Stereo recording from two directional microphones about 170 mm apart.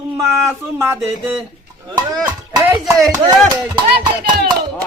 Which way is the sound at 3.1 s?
20° right (ahead or behind).